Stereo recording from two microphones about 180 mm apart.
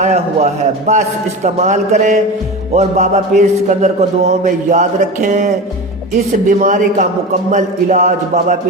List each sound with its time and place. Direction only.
0.0 s a man's voice: 40° right (ahead or behind)
6.6 s a man's voice: 45° right (ahead or behind)